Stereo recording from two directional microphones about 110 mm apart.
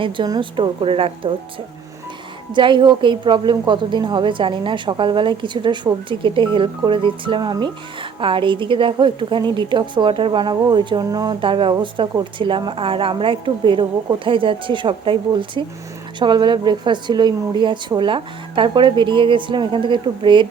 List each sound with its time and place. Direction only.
0.3 s a woman's voice: 50° right (ahead or behind)
2.5 s a woman's voice: 45° right (ahead or behind)